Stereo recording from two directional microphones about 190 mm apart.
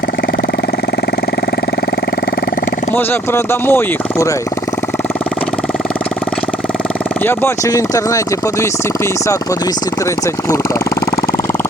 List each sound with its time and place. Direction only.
2.9 s speech: 10° left (ahead or behind)
7.3 s speech: 15° left (ahead or behind)